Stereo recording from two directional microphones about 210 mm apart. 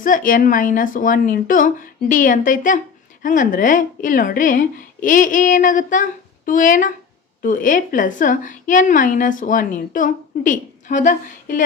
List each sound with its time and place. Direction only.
0.0 s a woman's voice: 40° left (ahead or behind)